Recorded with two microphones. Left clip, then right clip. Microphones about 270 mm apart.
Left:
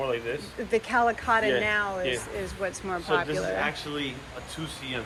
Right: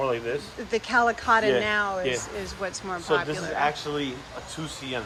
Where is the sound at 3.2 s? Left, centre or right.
Right.